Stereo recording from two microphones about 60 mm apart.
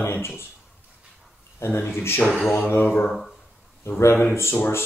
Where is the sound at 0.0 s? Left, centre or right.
Left.